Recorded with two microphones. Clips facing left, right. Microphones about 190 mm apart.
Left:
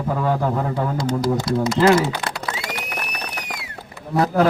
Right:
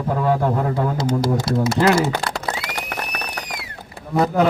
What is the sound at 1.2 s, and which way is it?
Speech, 25° right (ahead or behind).